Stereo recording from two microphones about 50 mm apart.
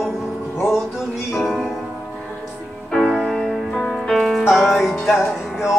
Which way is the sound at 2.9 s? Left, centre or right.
Centre.